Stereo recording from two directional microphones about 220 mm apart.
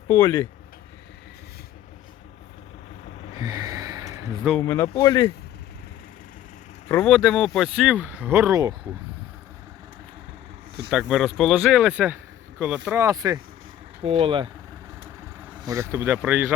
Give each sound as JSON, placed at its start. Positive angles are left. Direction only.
{"t": 0.1, "sound": "speech", "side_deg": 15}
{"t": 3.3, "sound": "gasp", "side_deg": -15}
{"t": 4.6, "sound": "speech", "side_deg": 15}
{"t": 6.8, "sound": "speech", "side_deg": 5}
{"t": 10.9, "sound": "speech", "side_deg": 0}
{"t": 15.6, "sound": "speech", "side_deg": -15}